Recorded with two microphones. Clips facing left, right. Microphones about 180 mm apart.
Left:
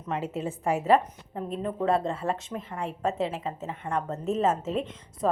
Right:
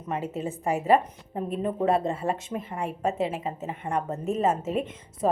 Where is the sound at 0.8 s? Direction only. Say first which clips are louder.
Right 1 dB; 10° right (ahead or behind).